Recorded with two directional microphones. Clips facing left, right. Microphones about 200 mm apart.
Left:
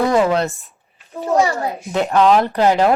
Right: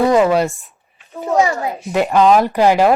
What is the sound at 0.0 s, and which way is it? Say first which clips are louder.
Speech: right 3 dB; 15° right (ahead or behind).